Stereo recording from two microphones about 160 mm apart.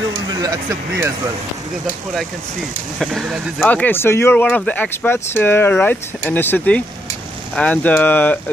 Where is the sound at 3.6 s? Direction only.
10° left (ahead or behind).